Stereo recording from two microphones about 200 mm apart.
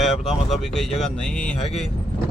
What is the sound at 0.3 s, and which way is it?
Speech, centre (ahead or behind).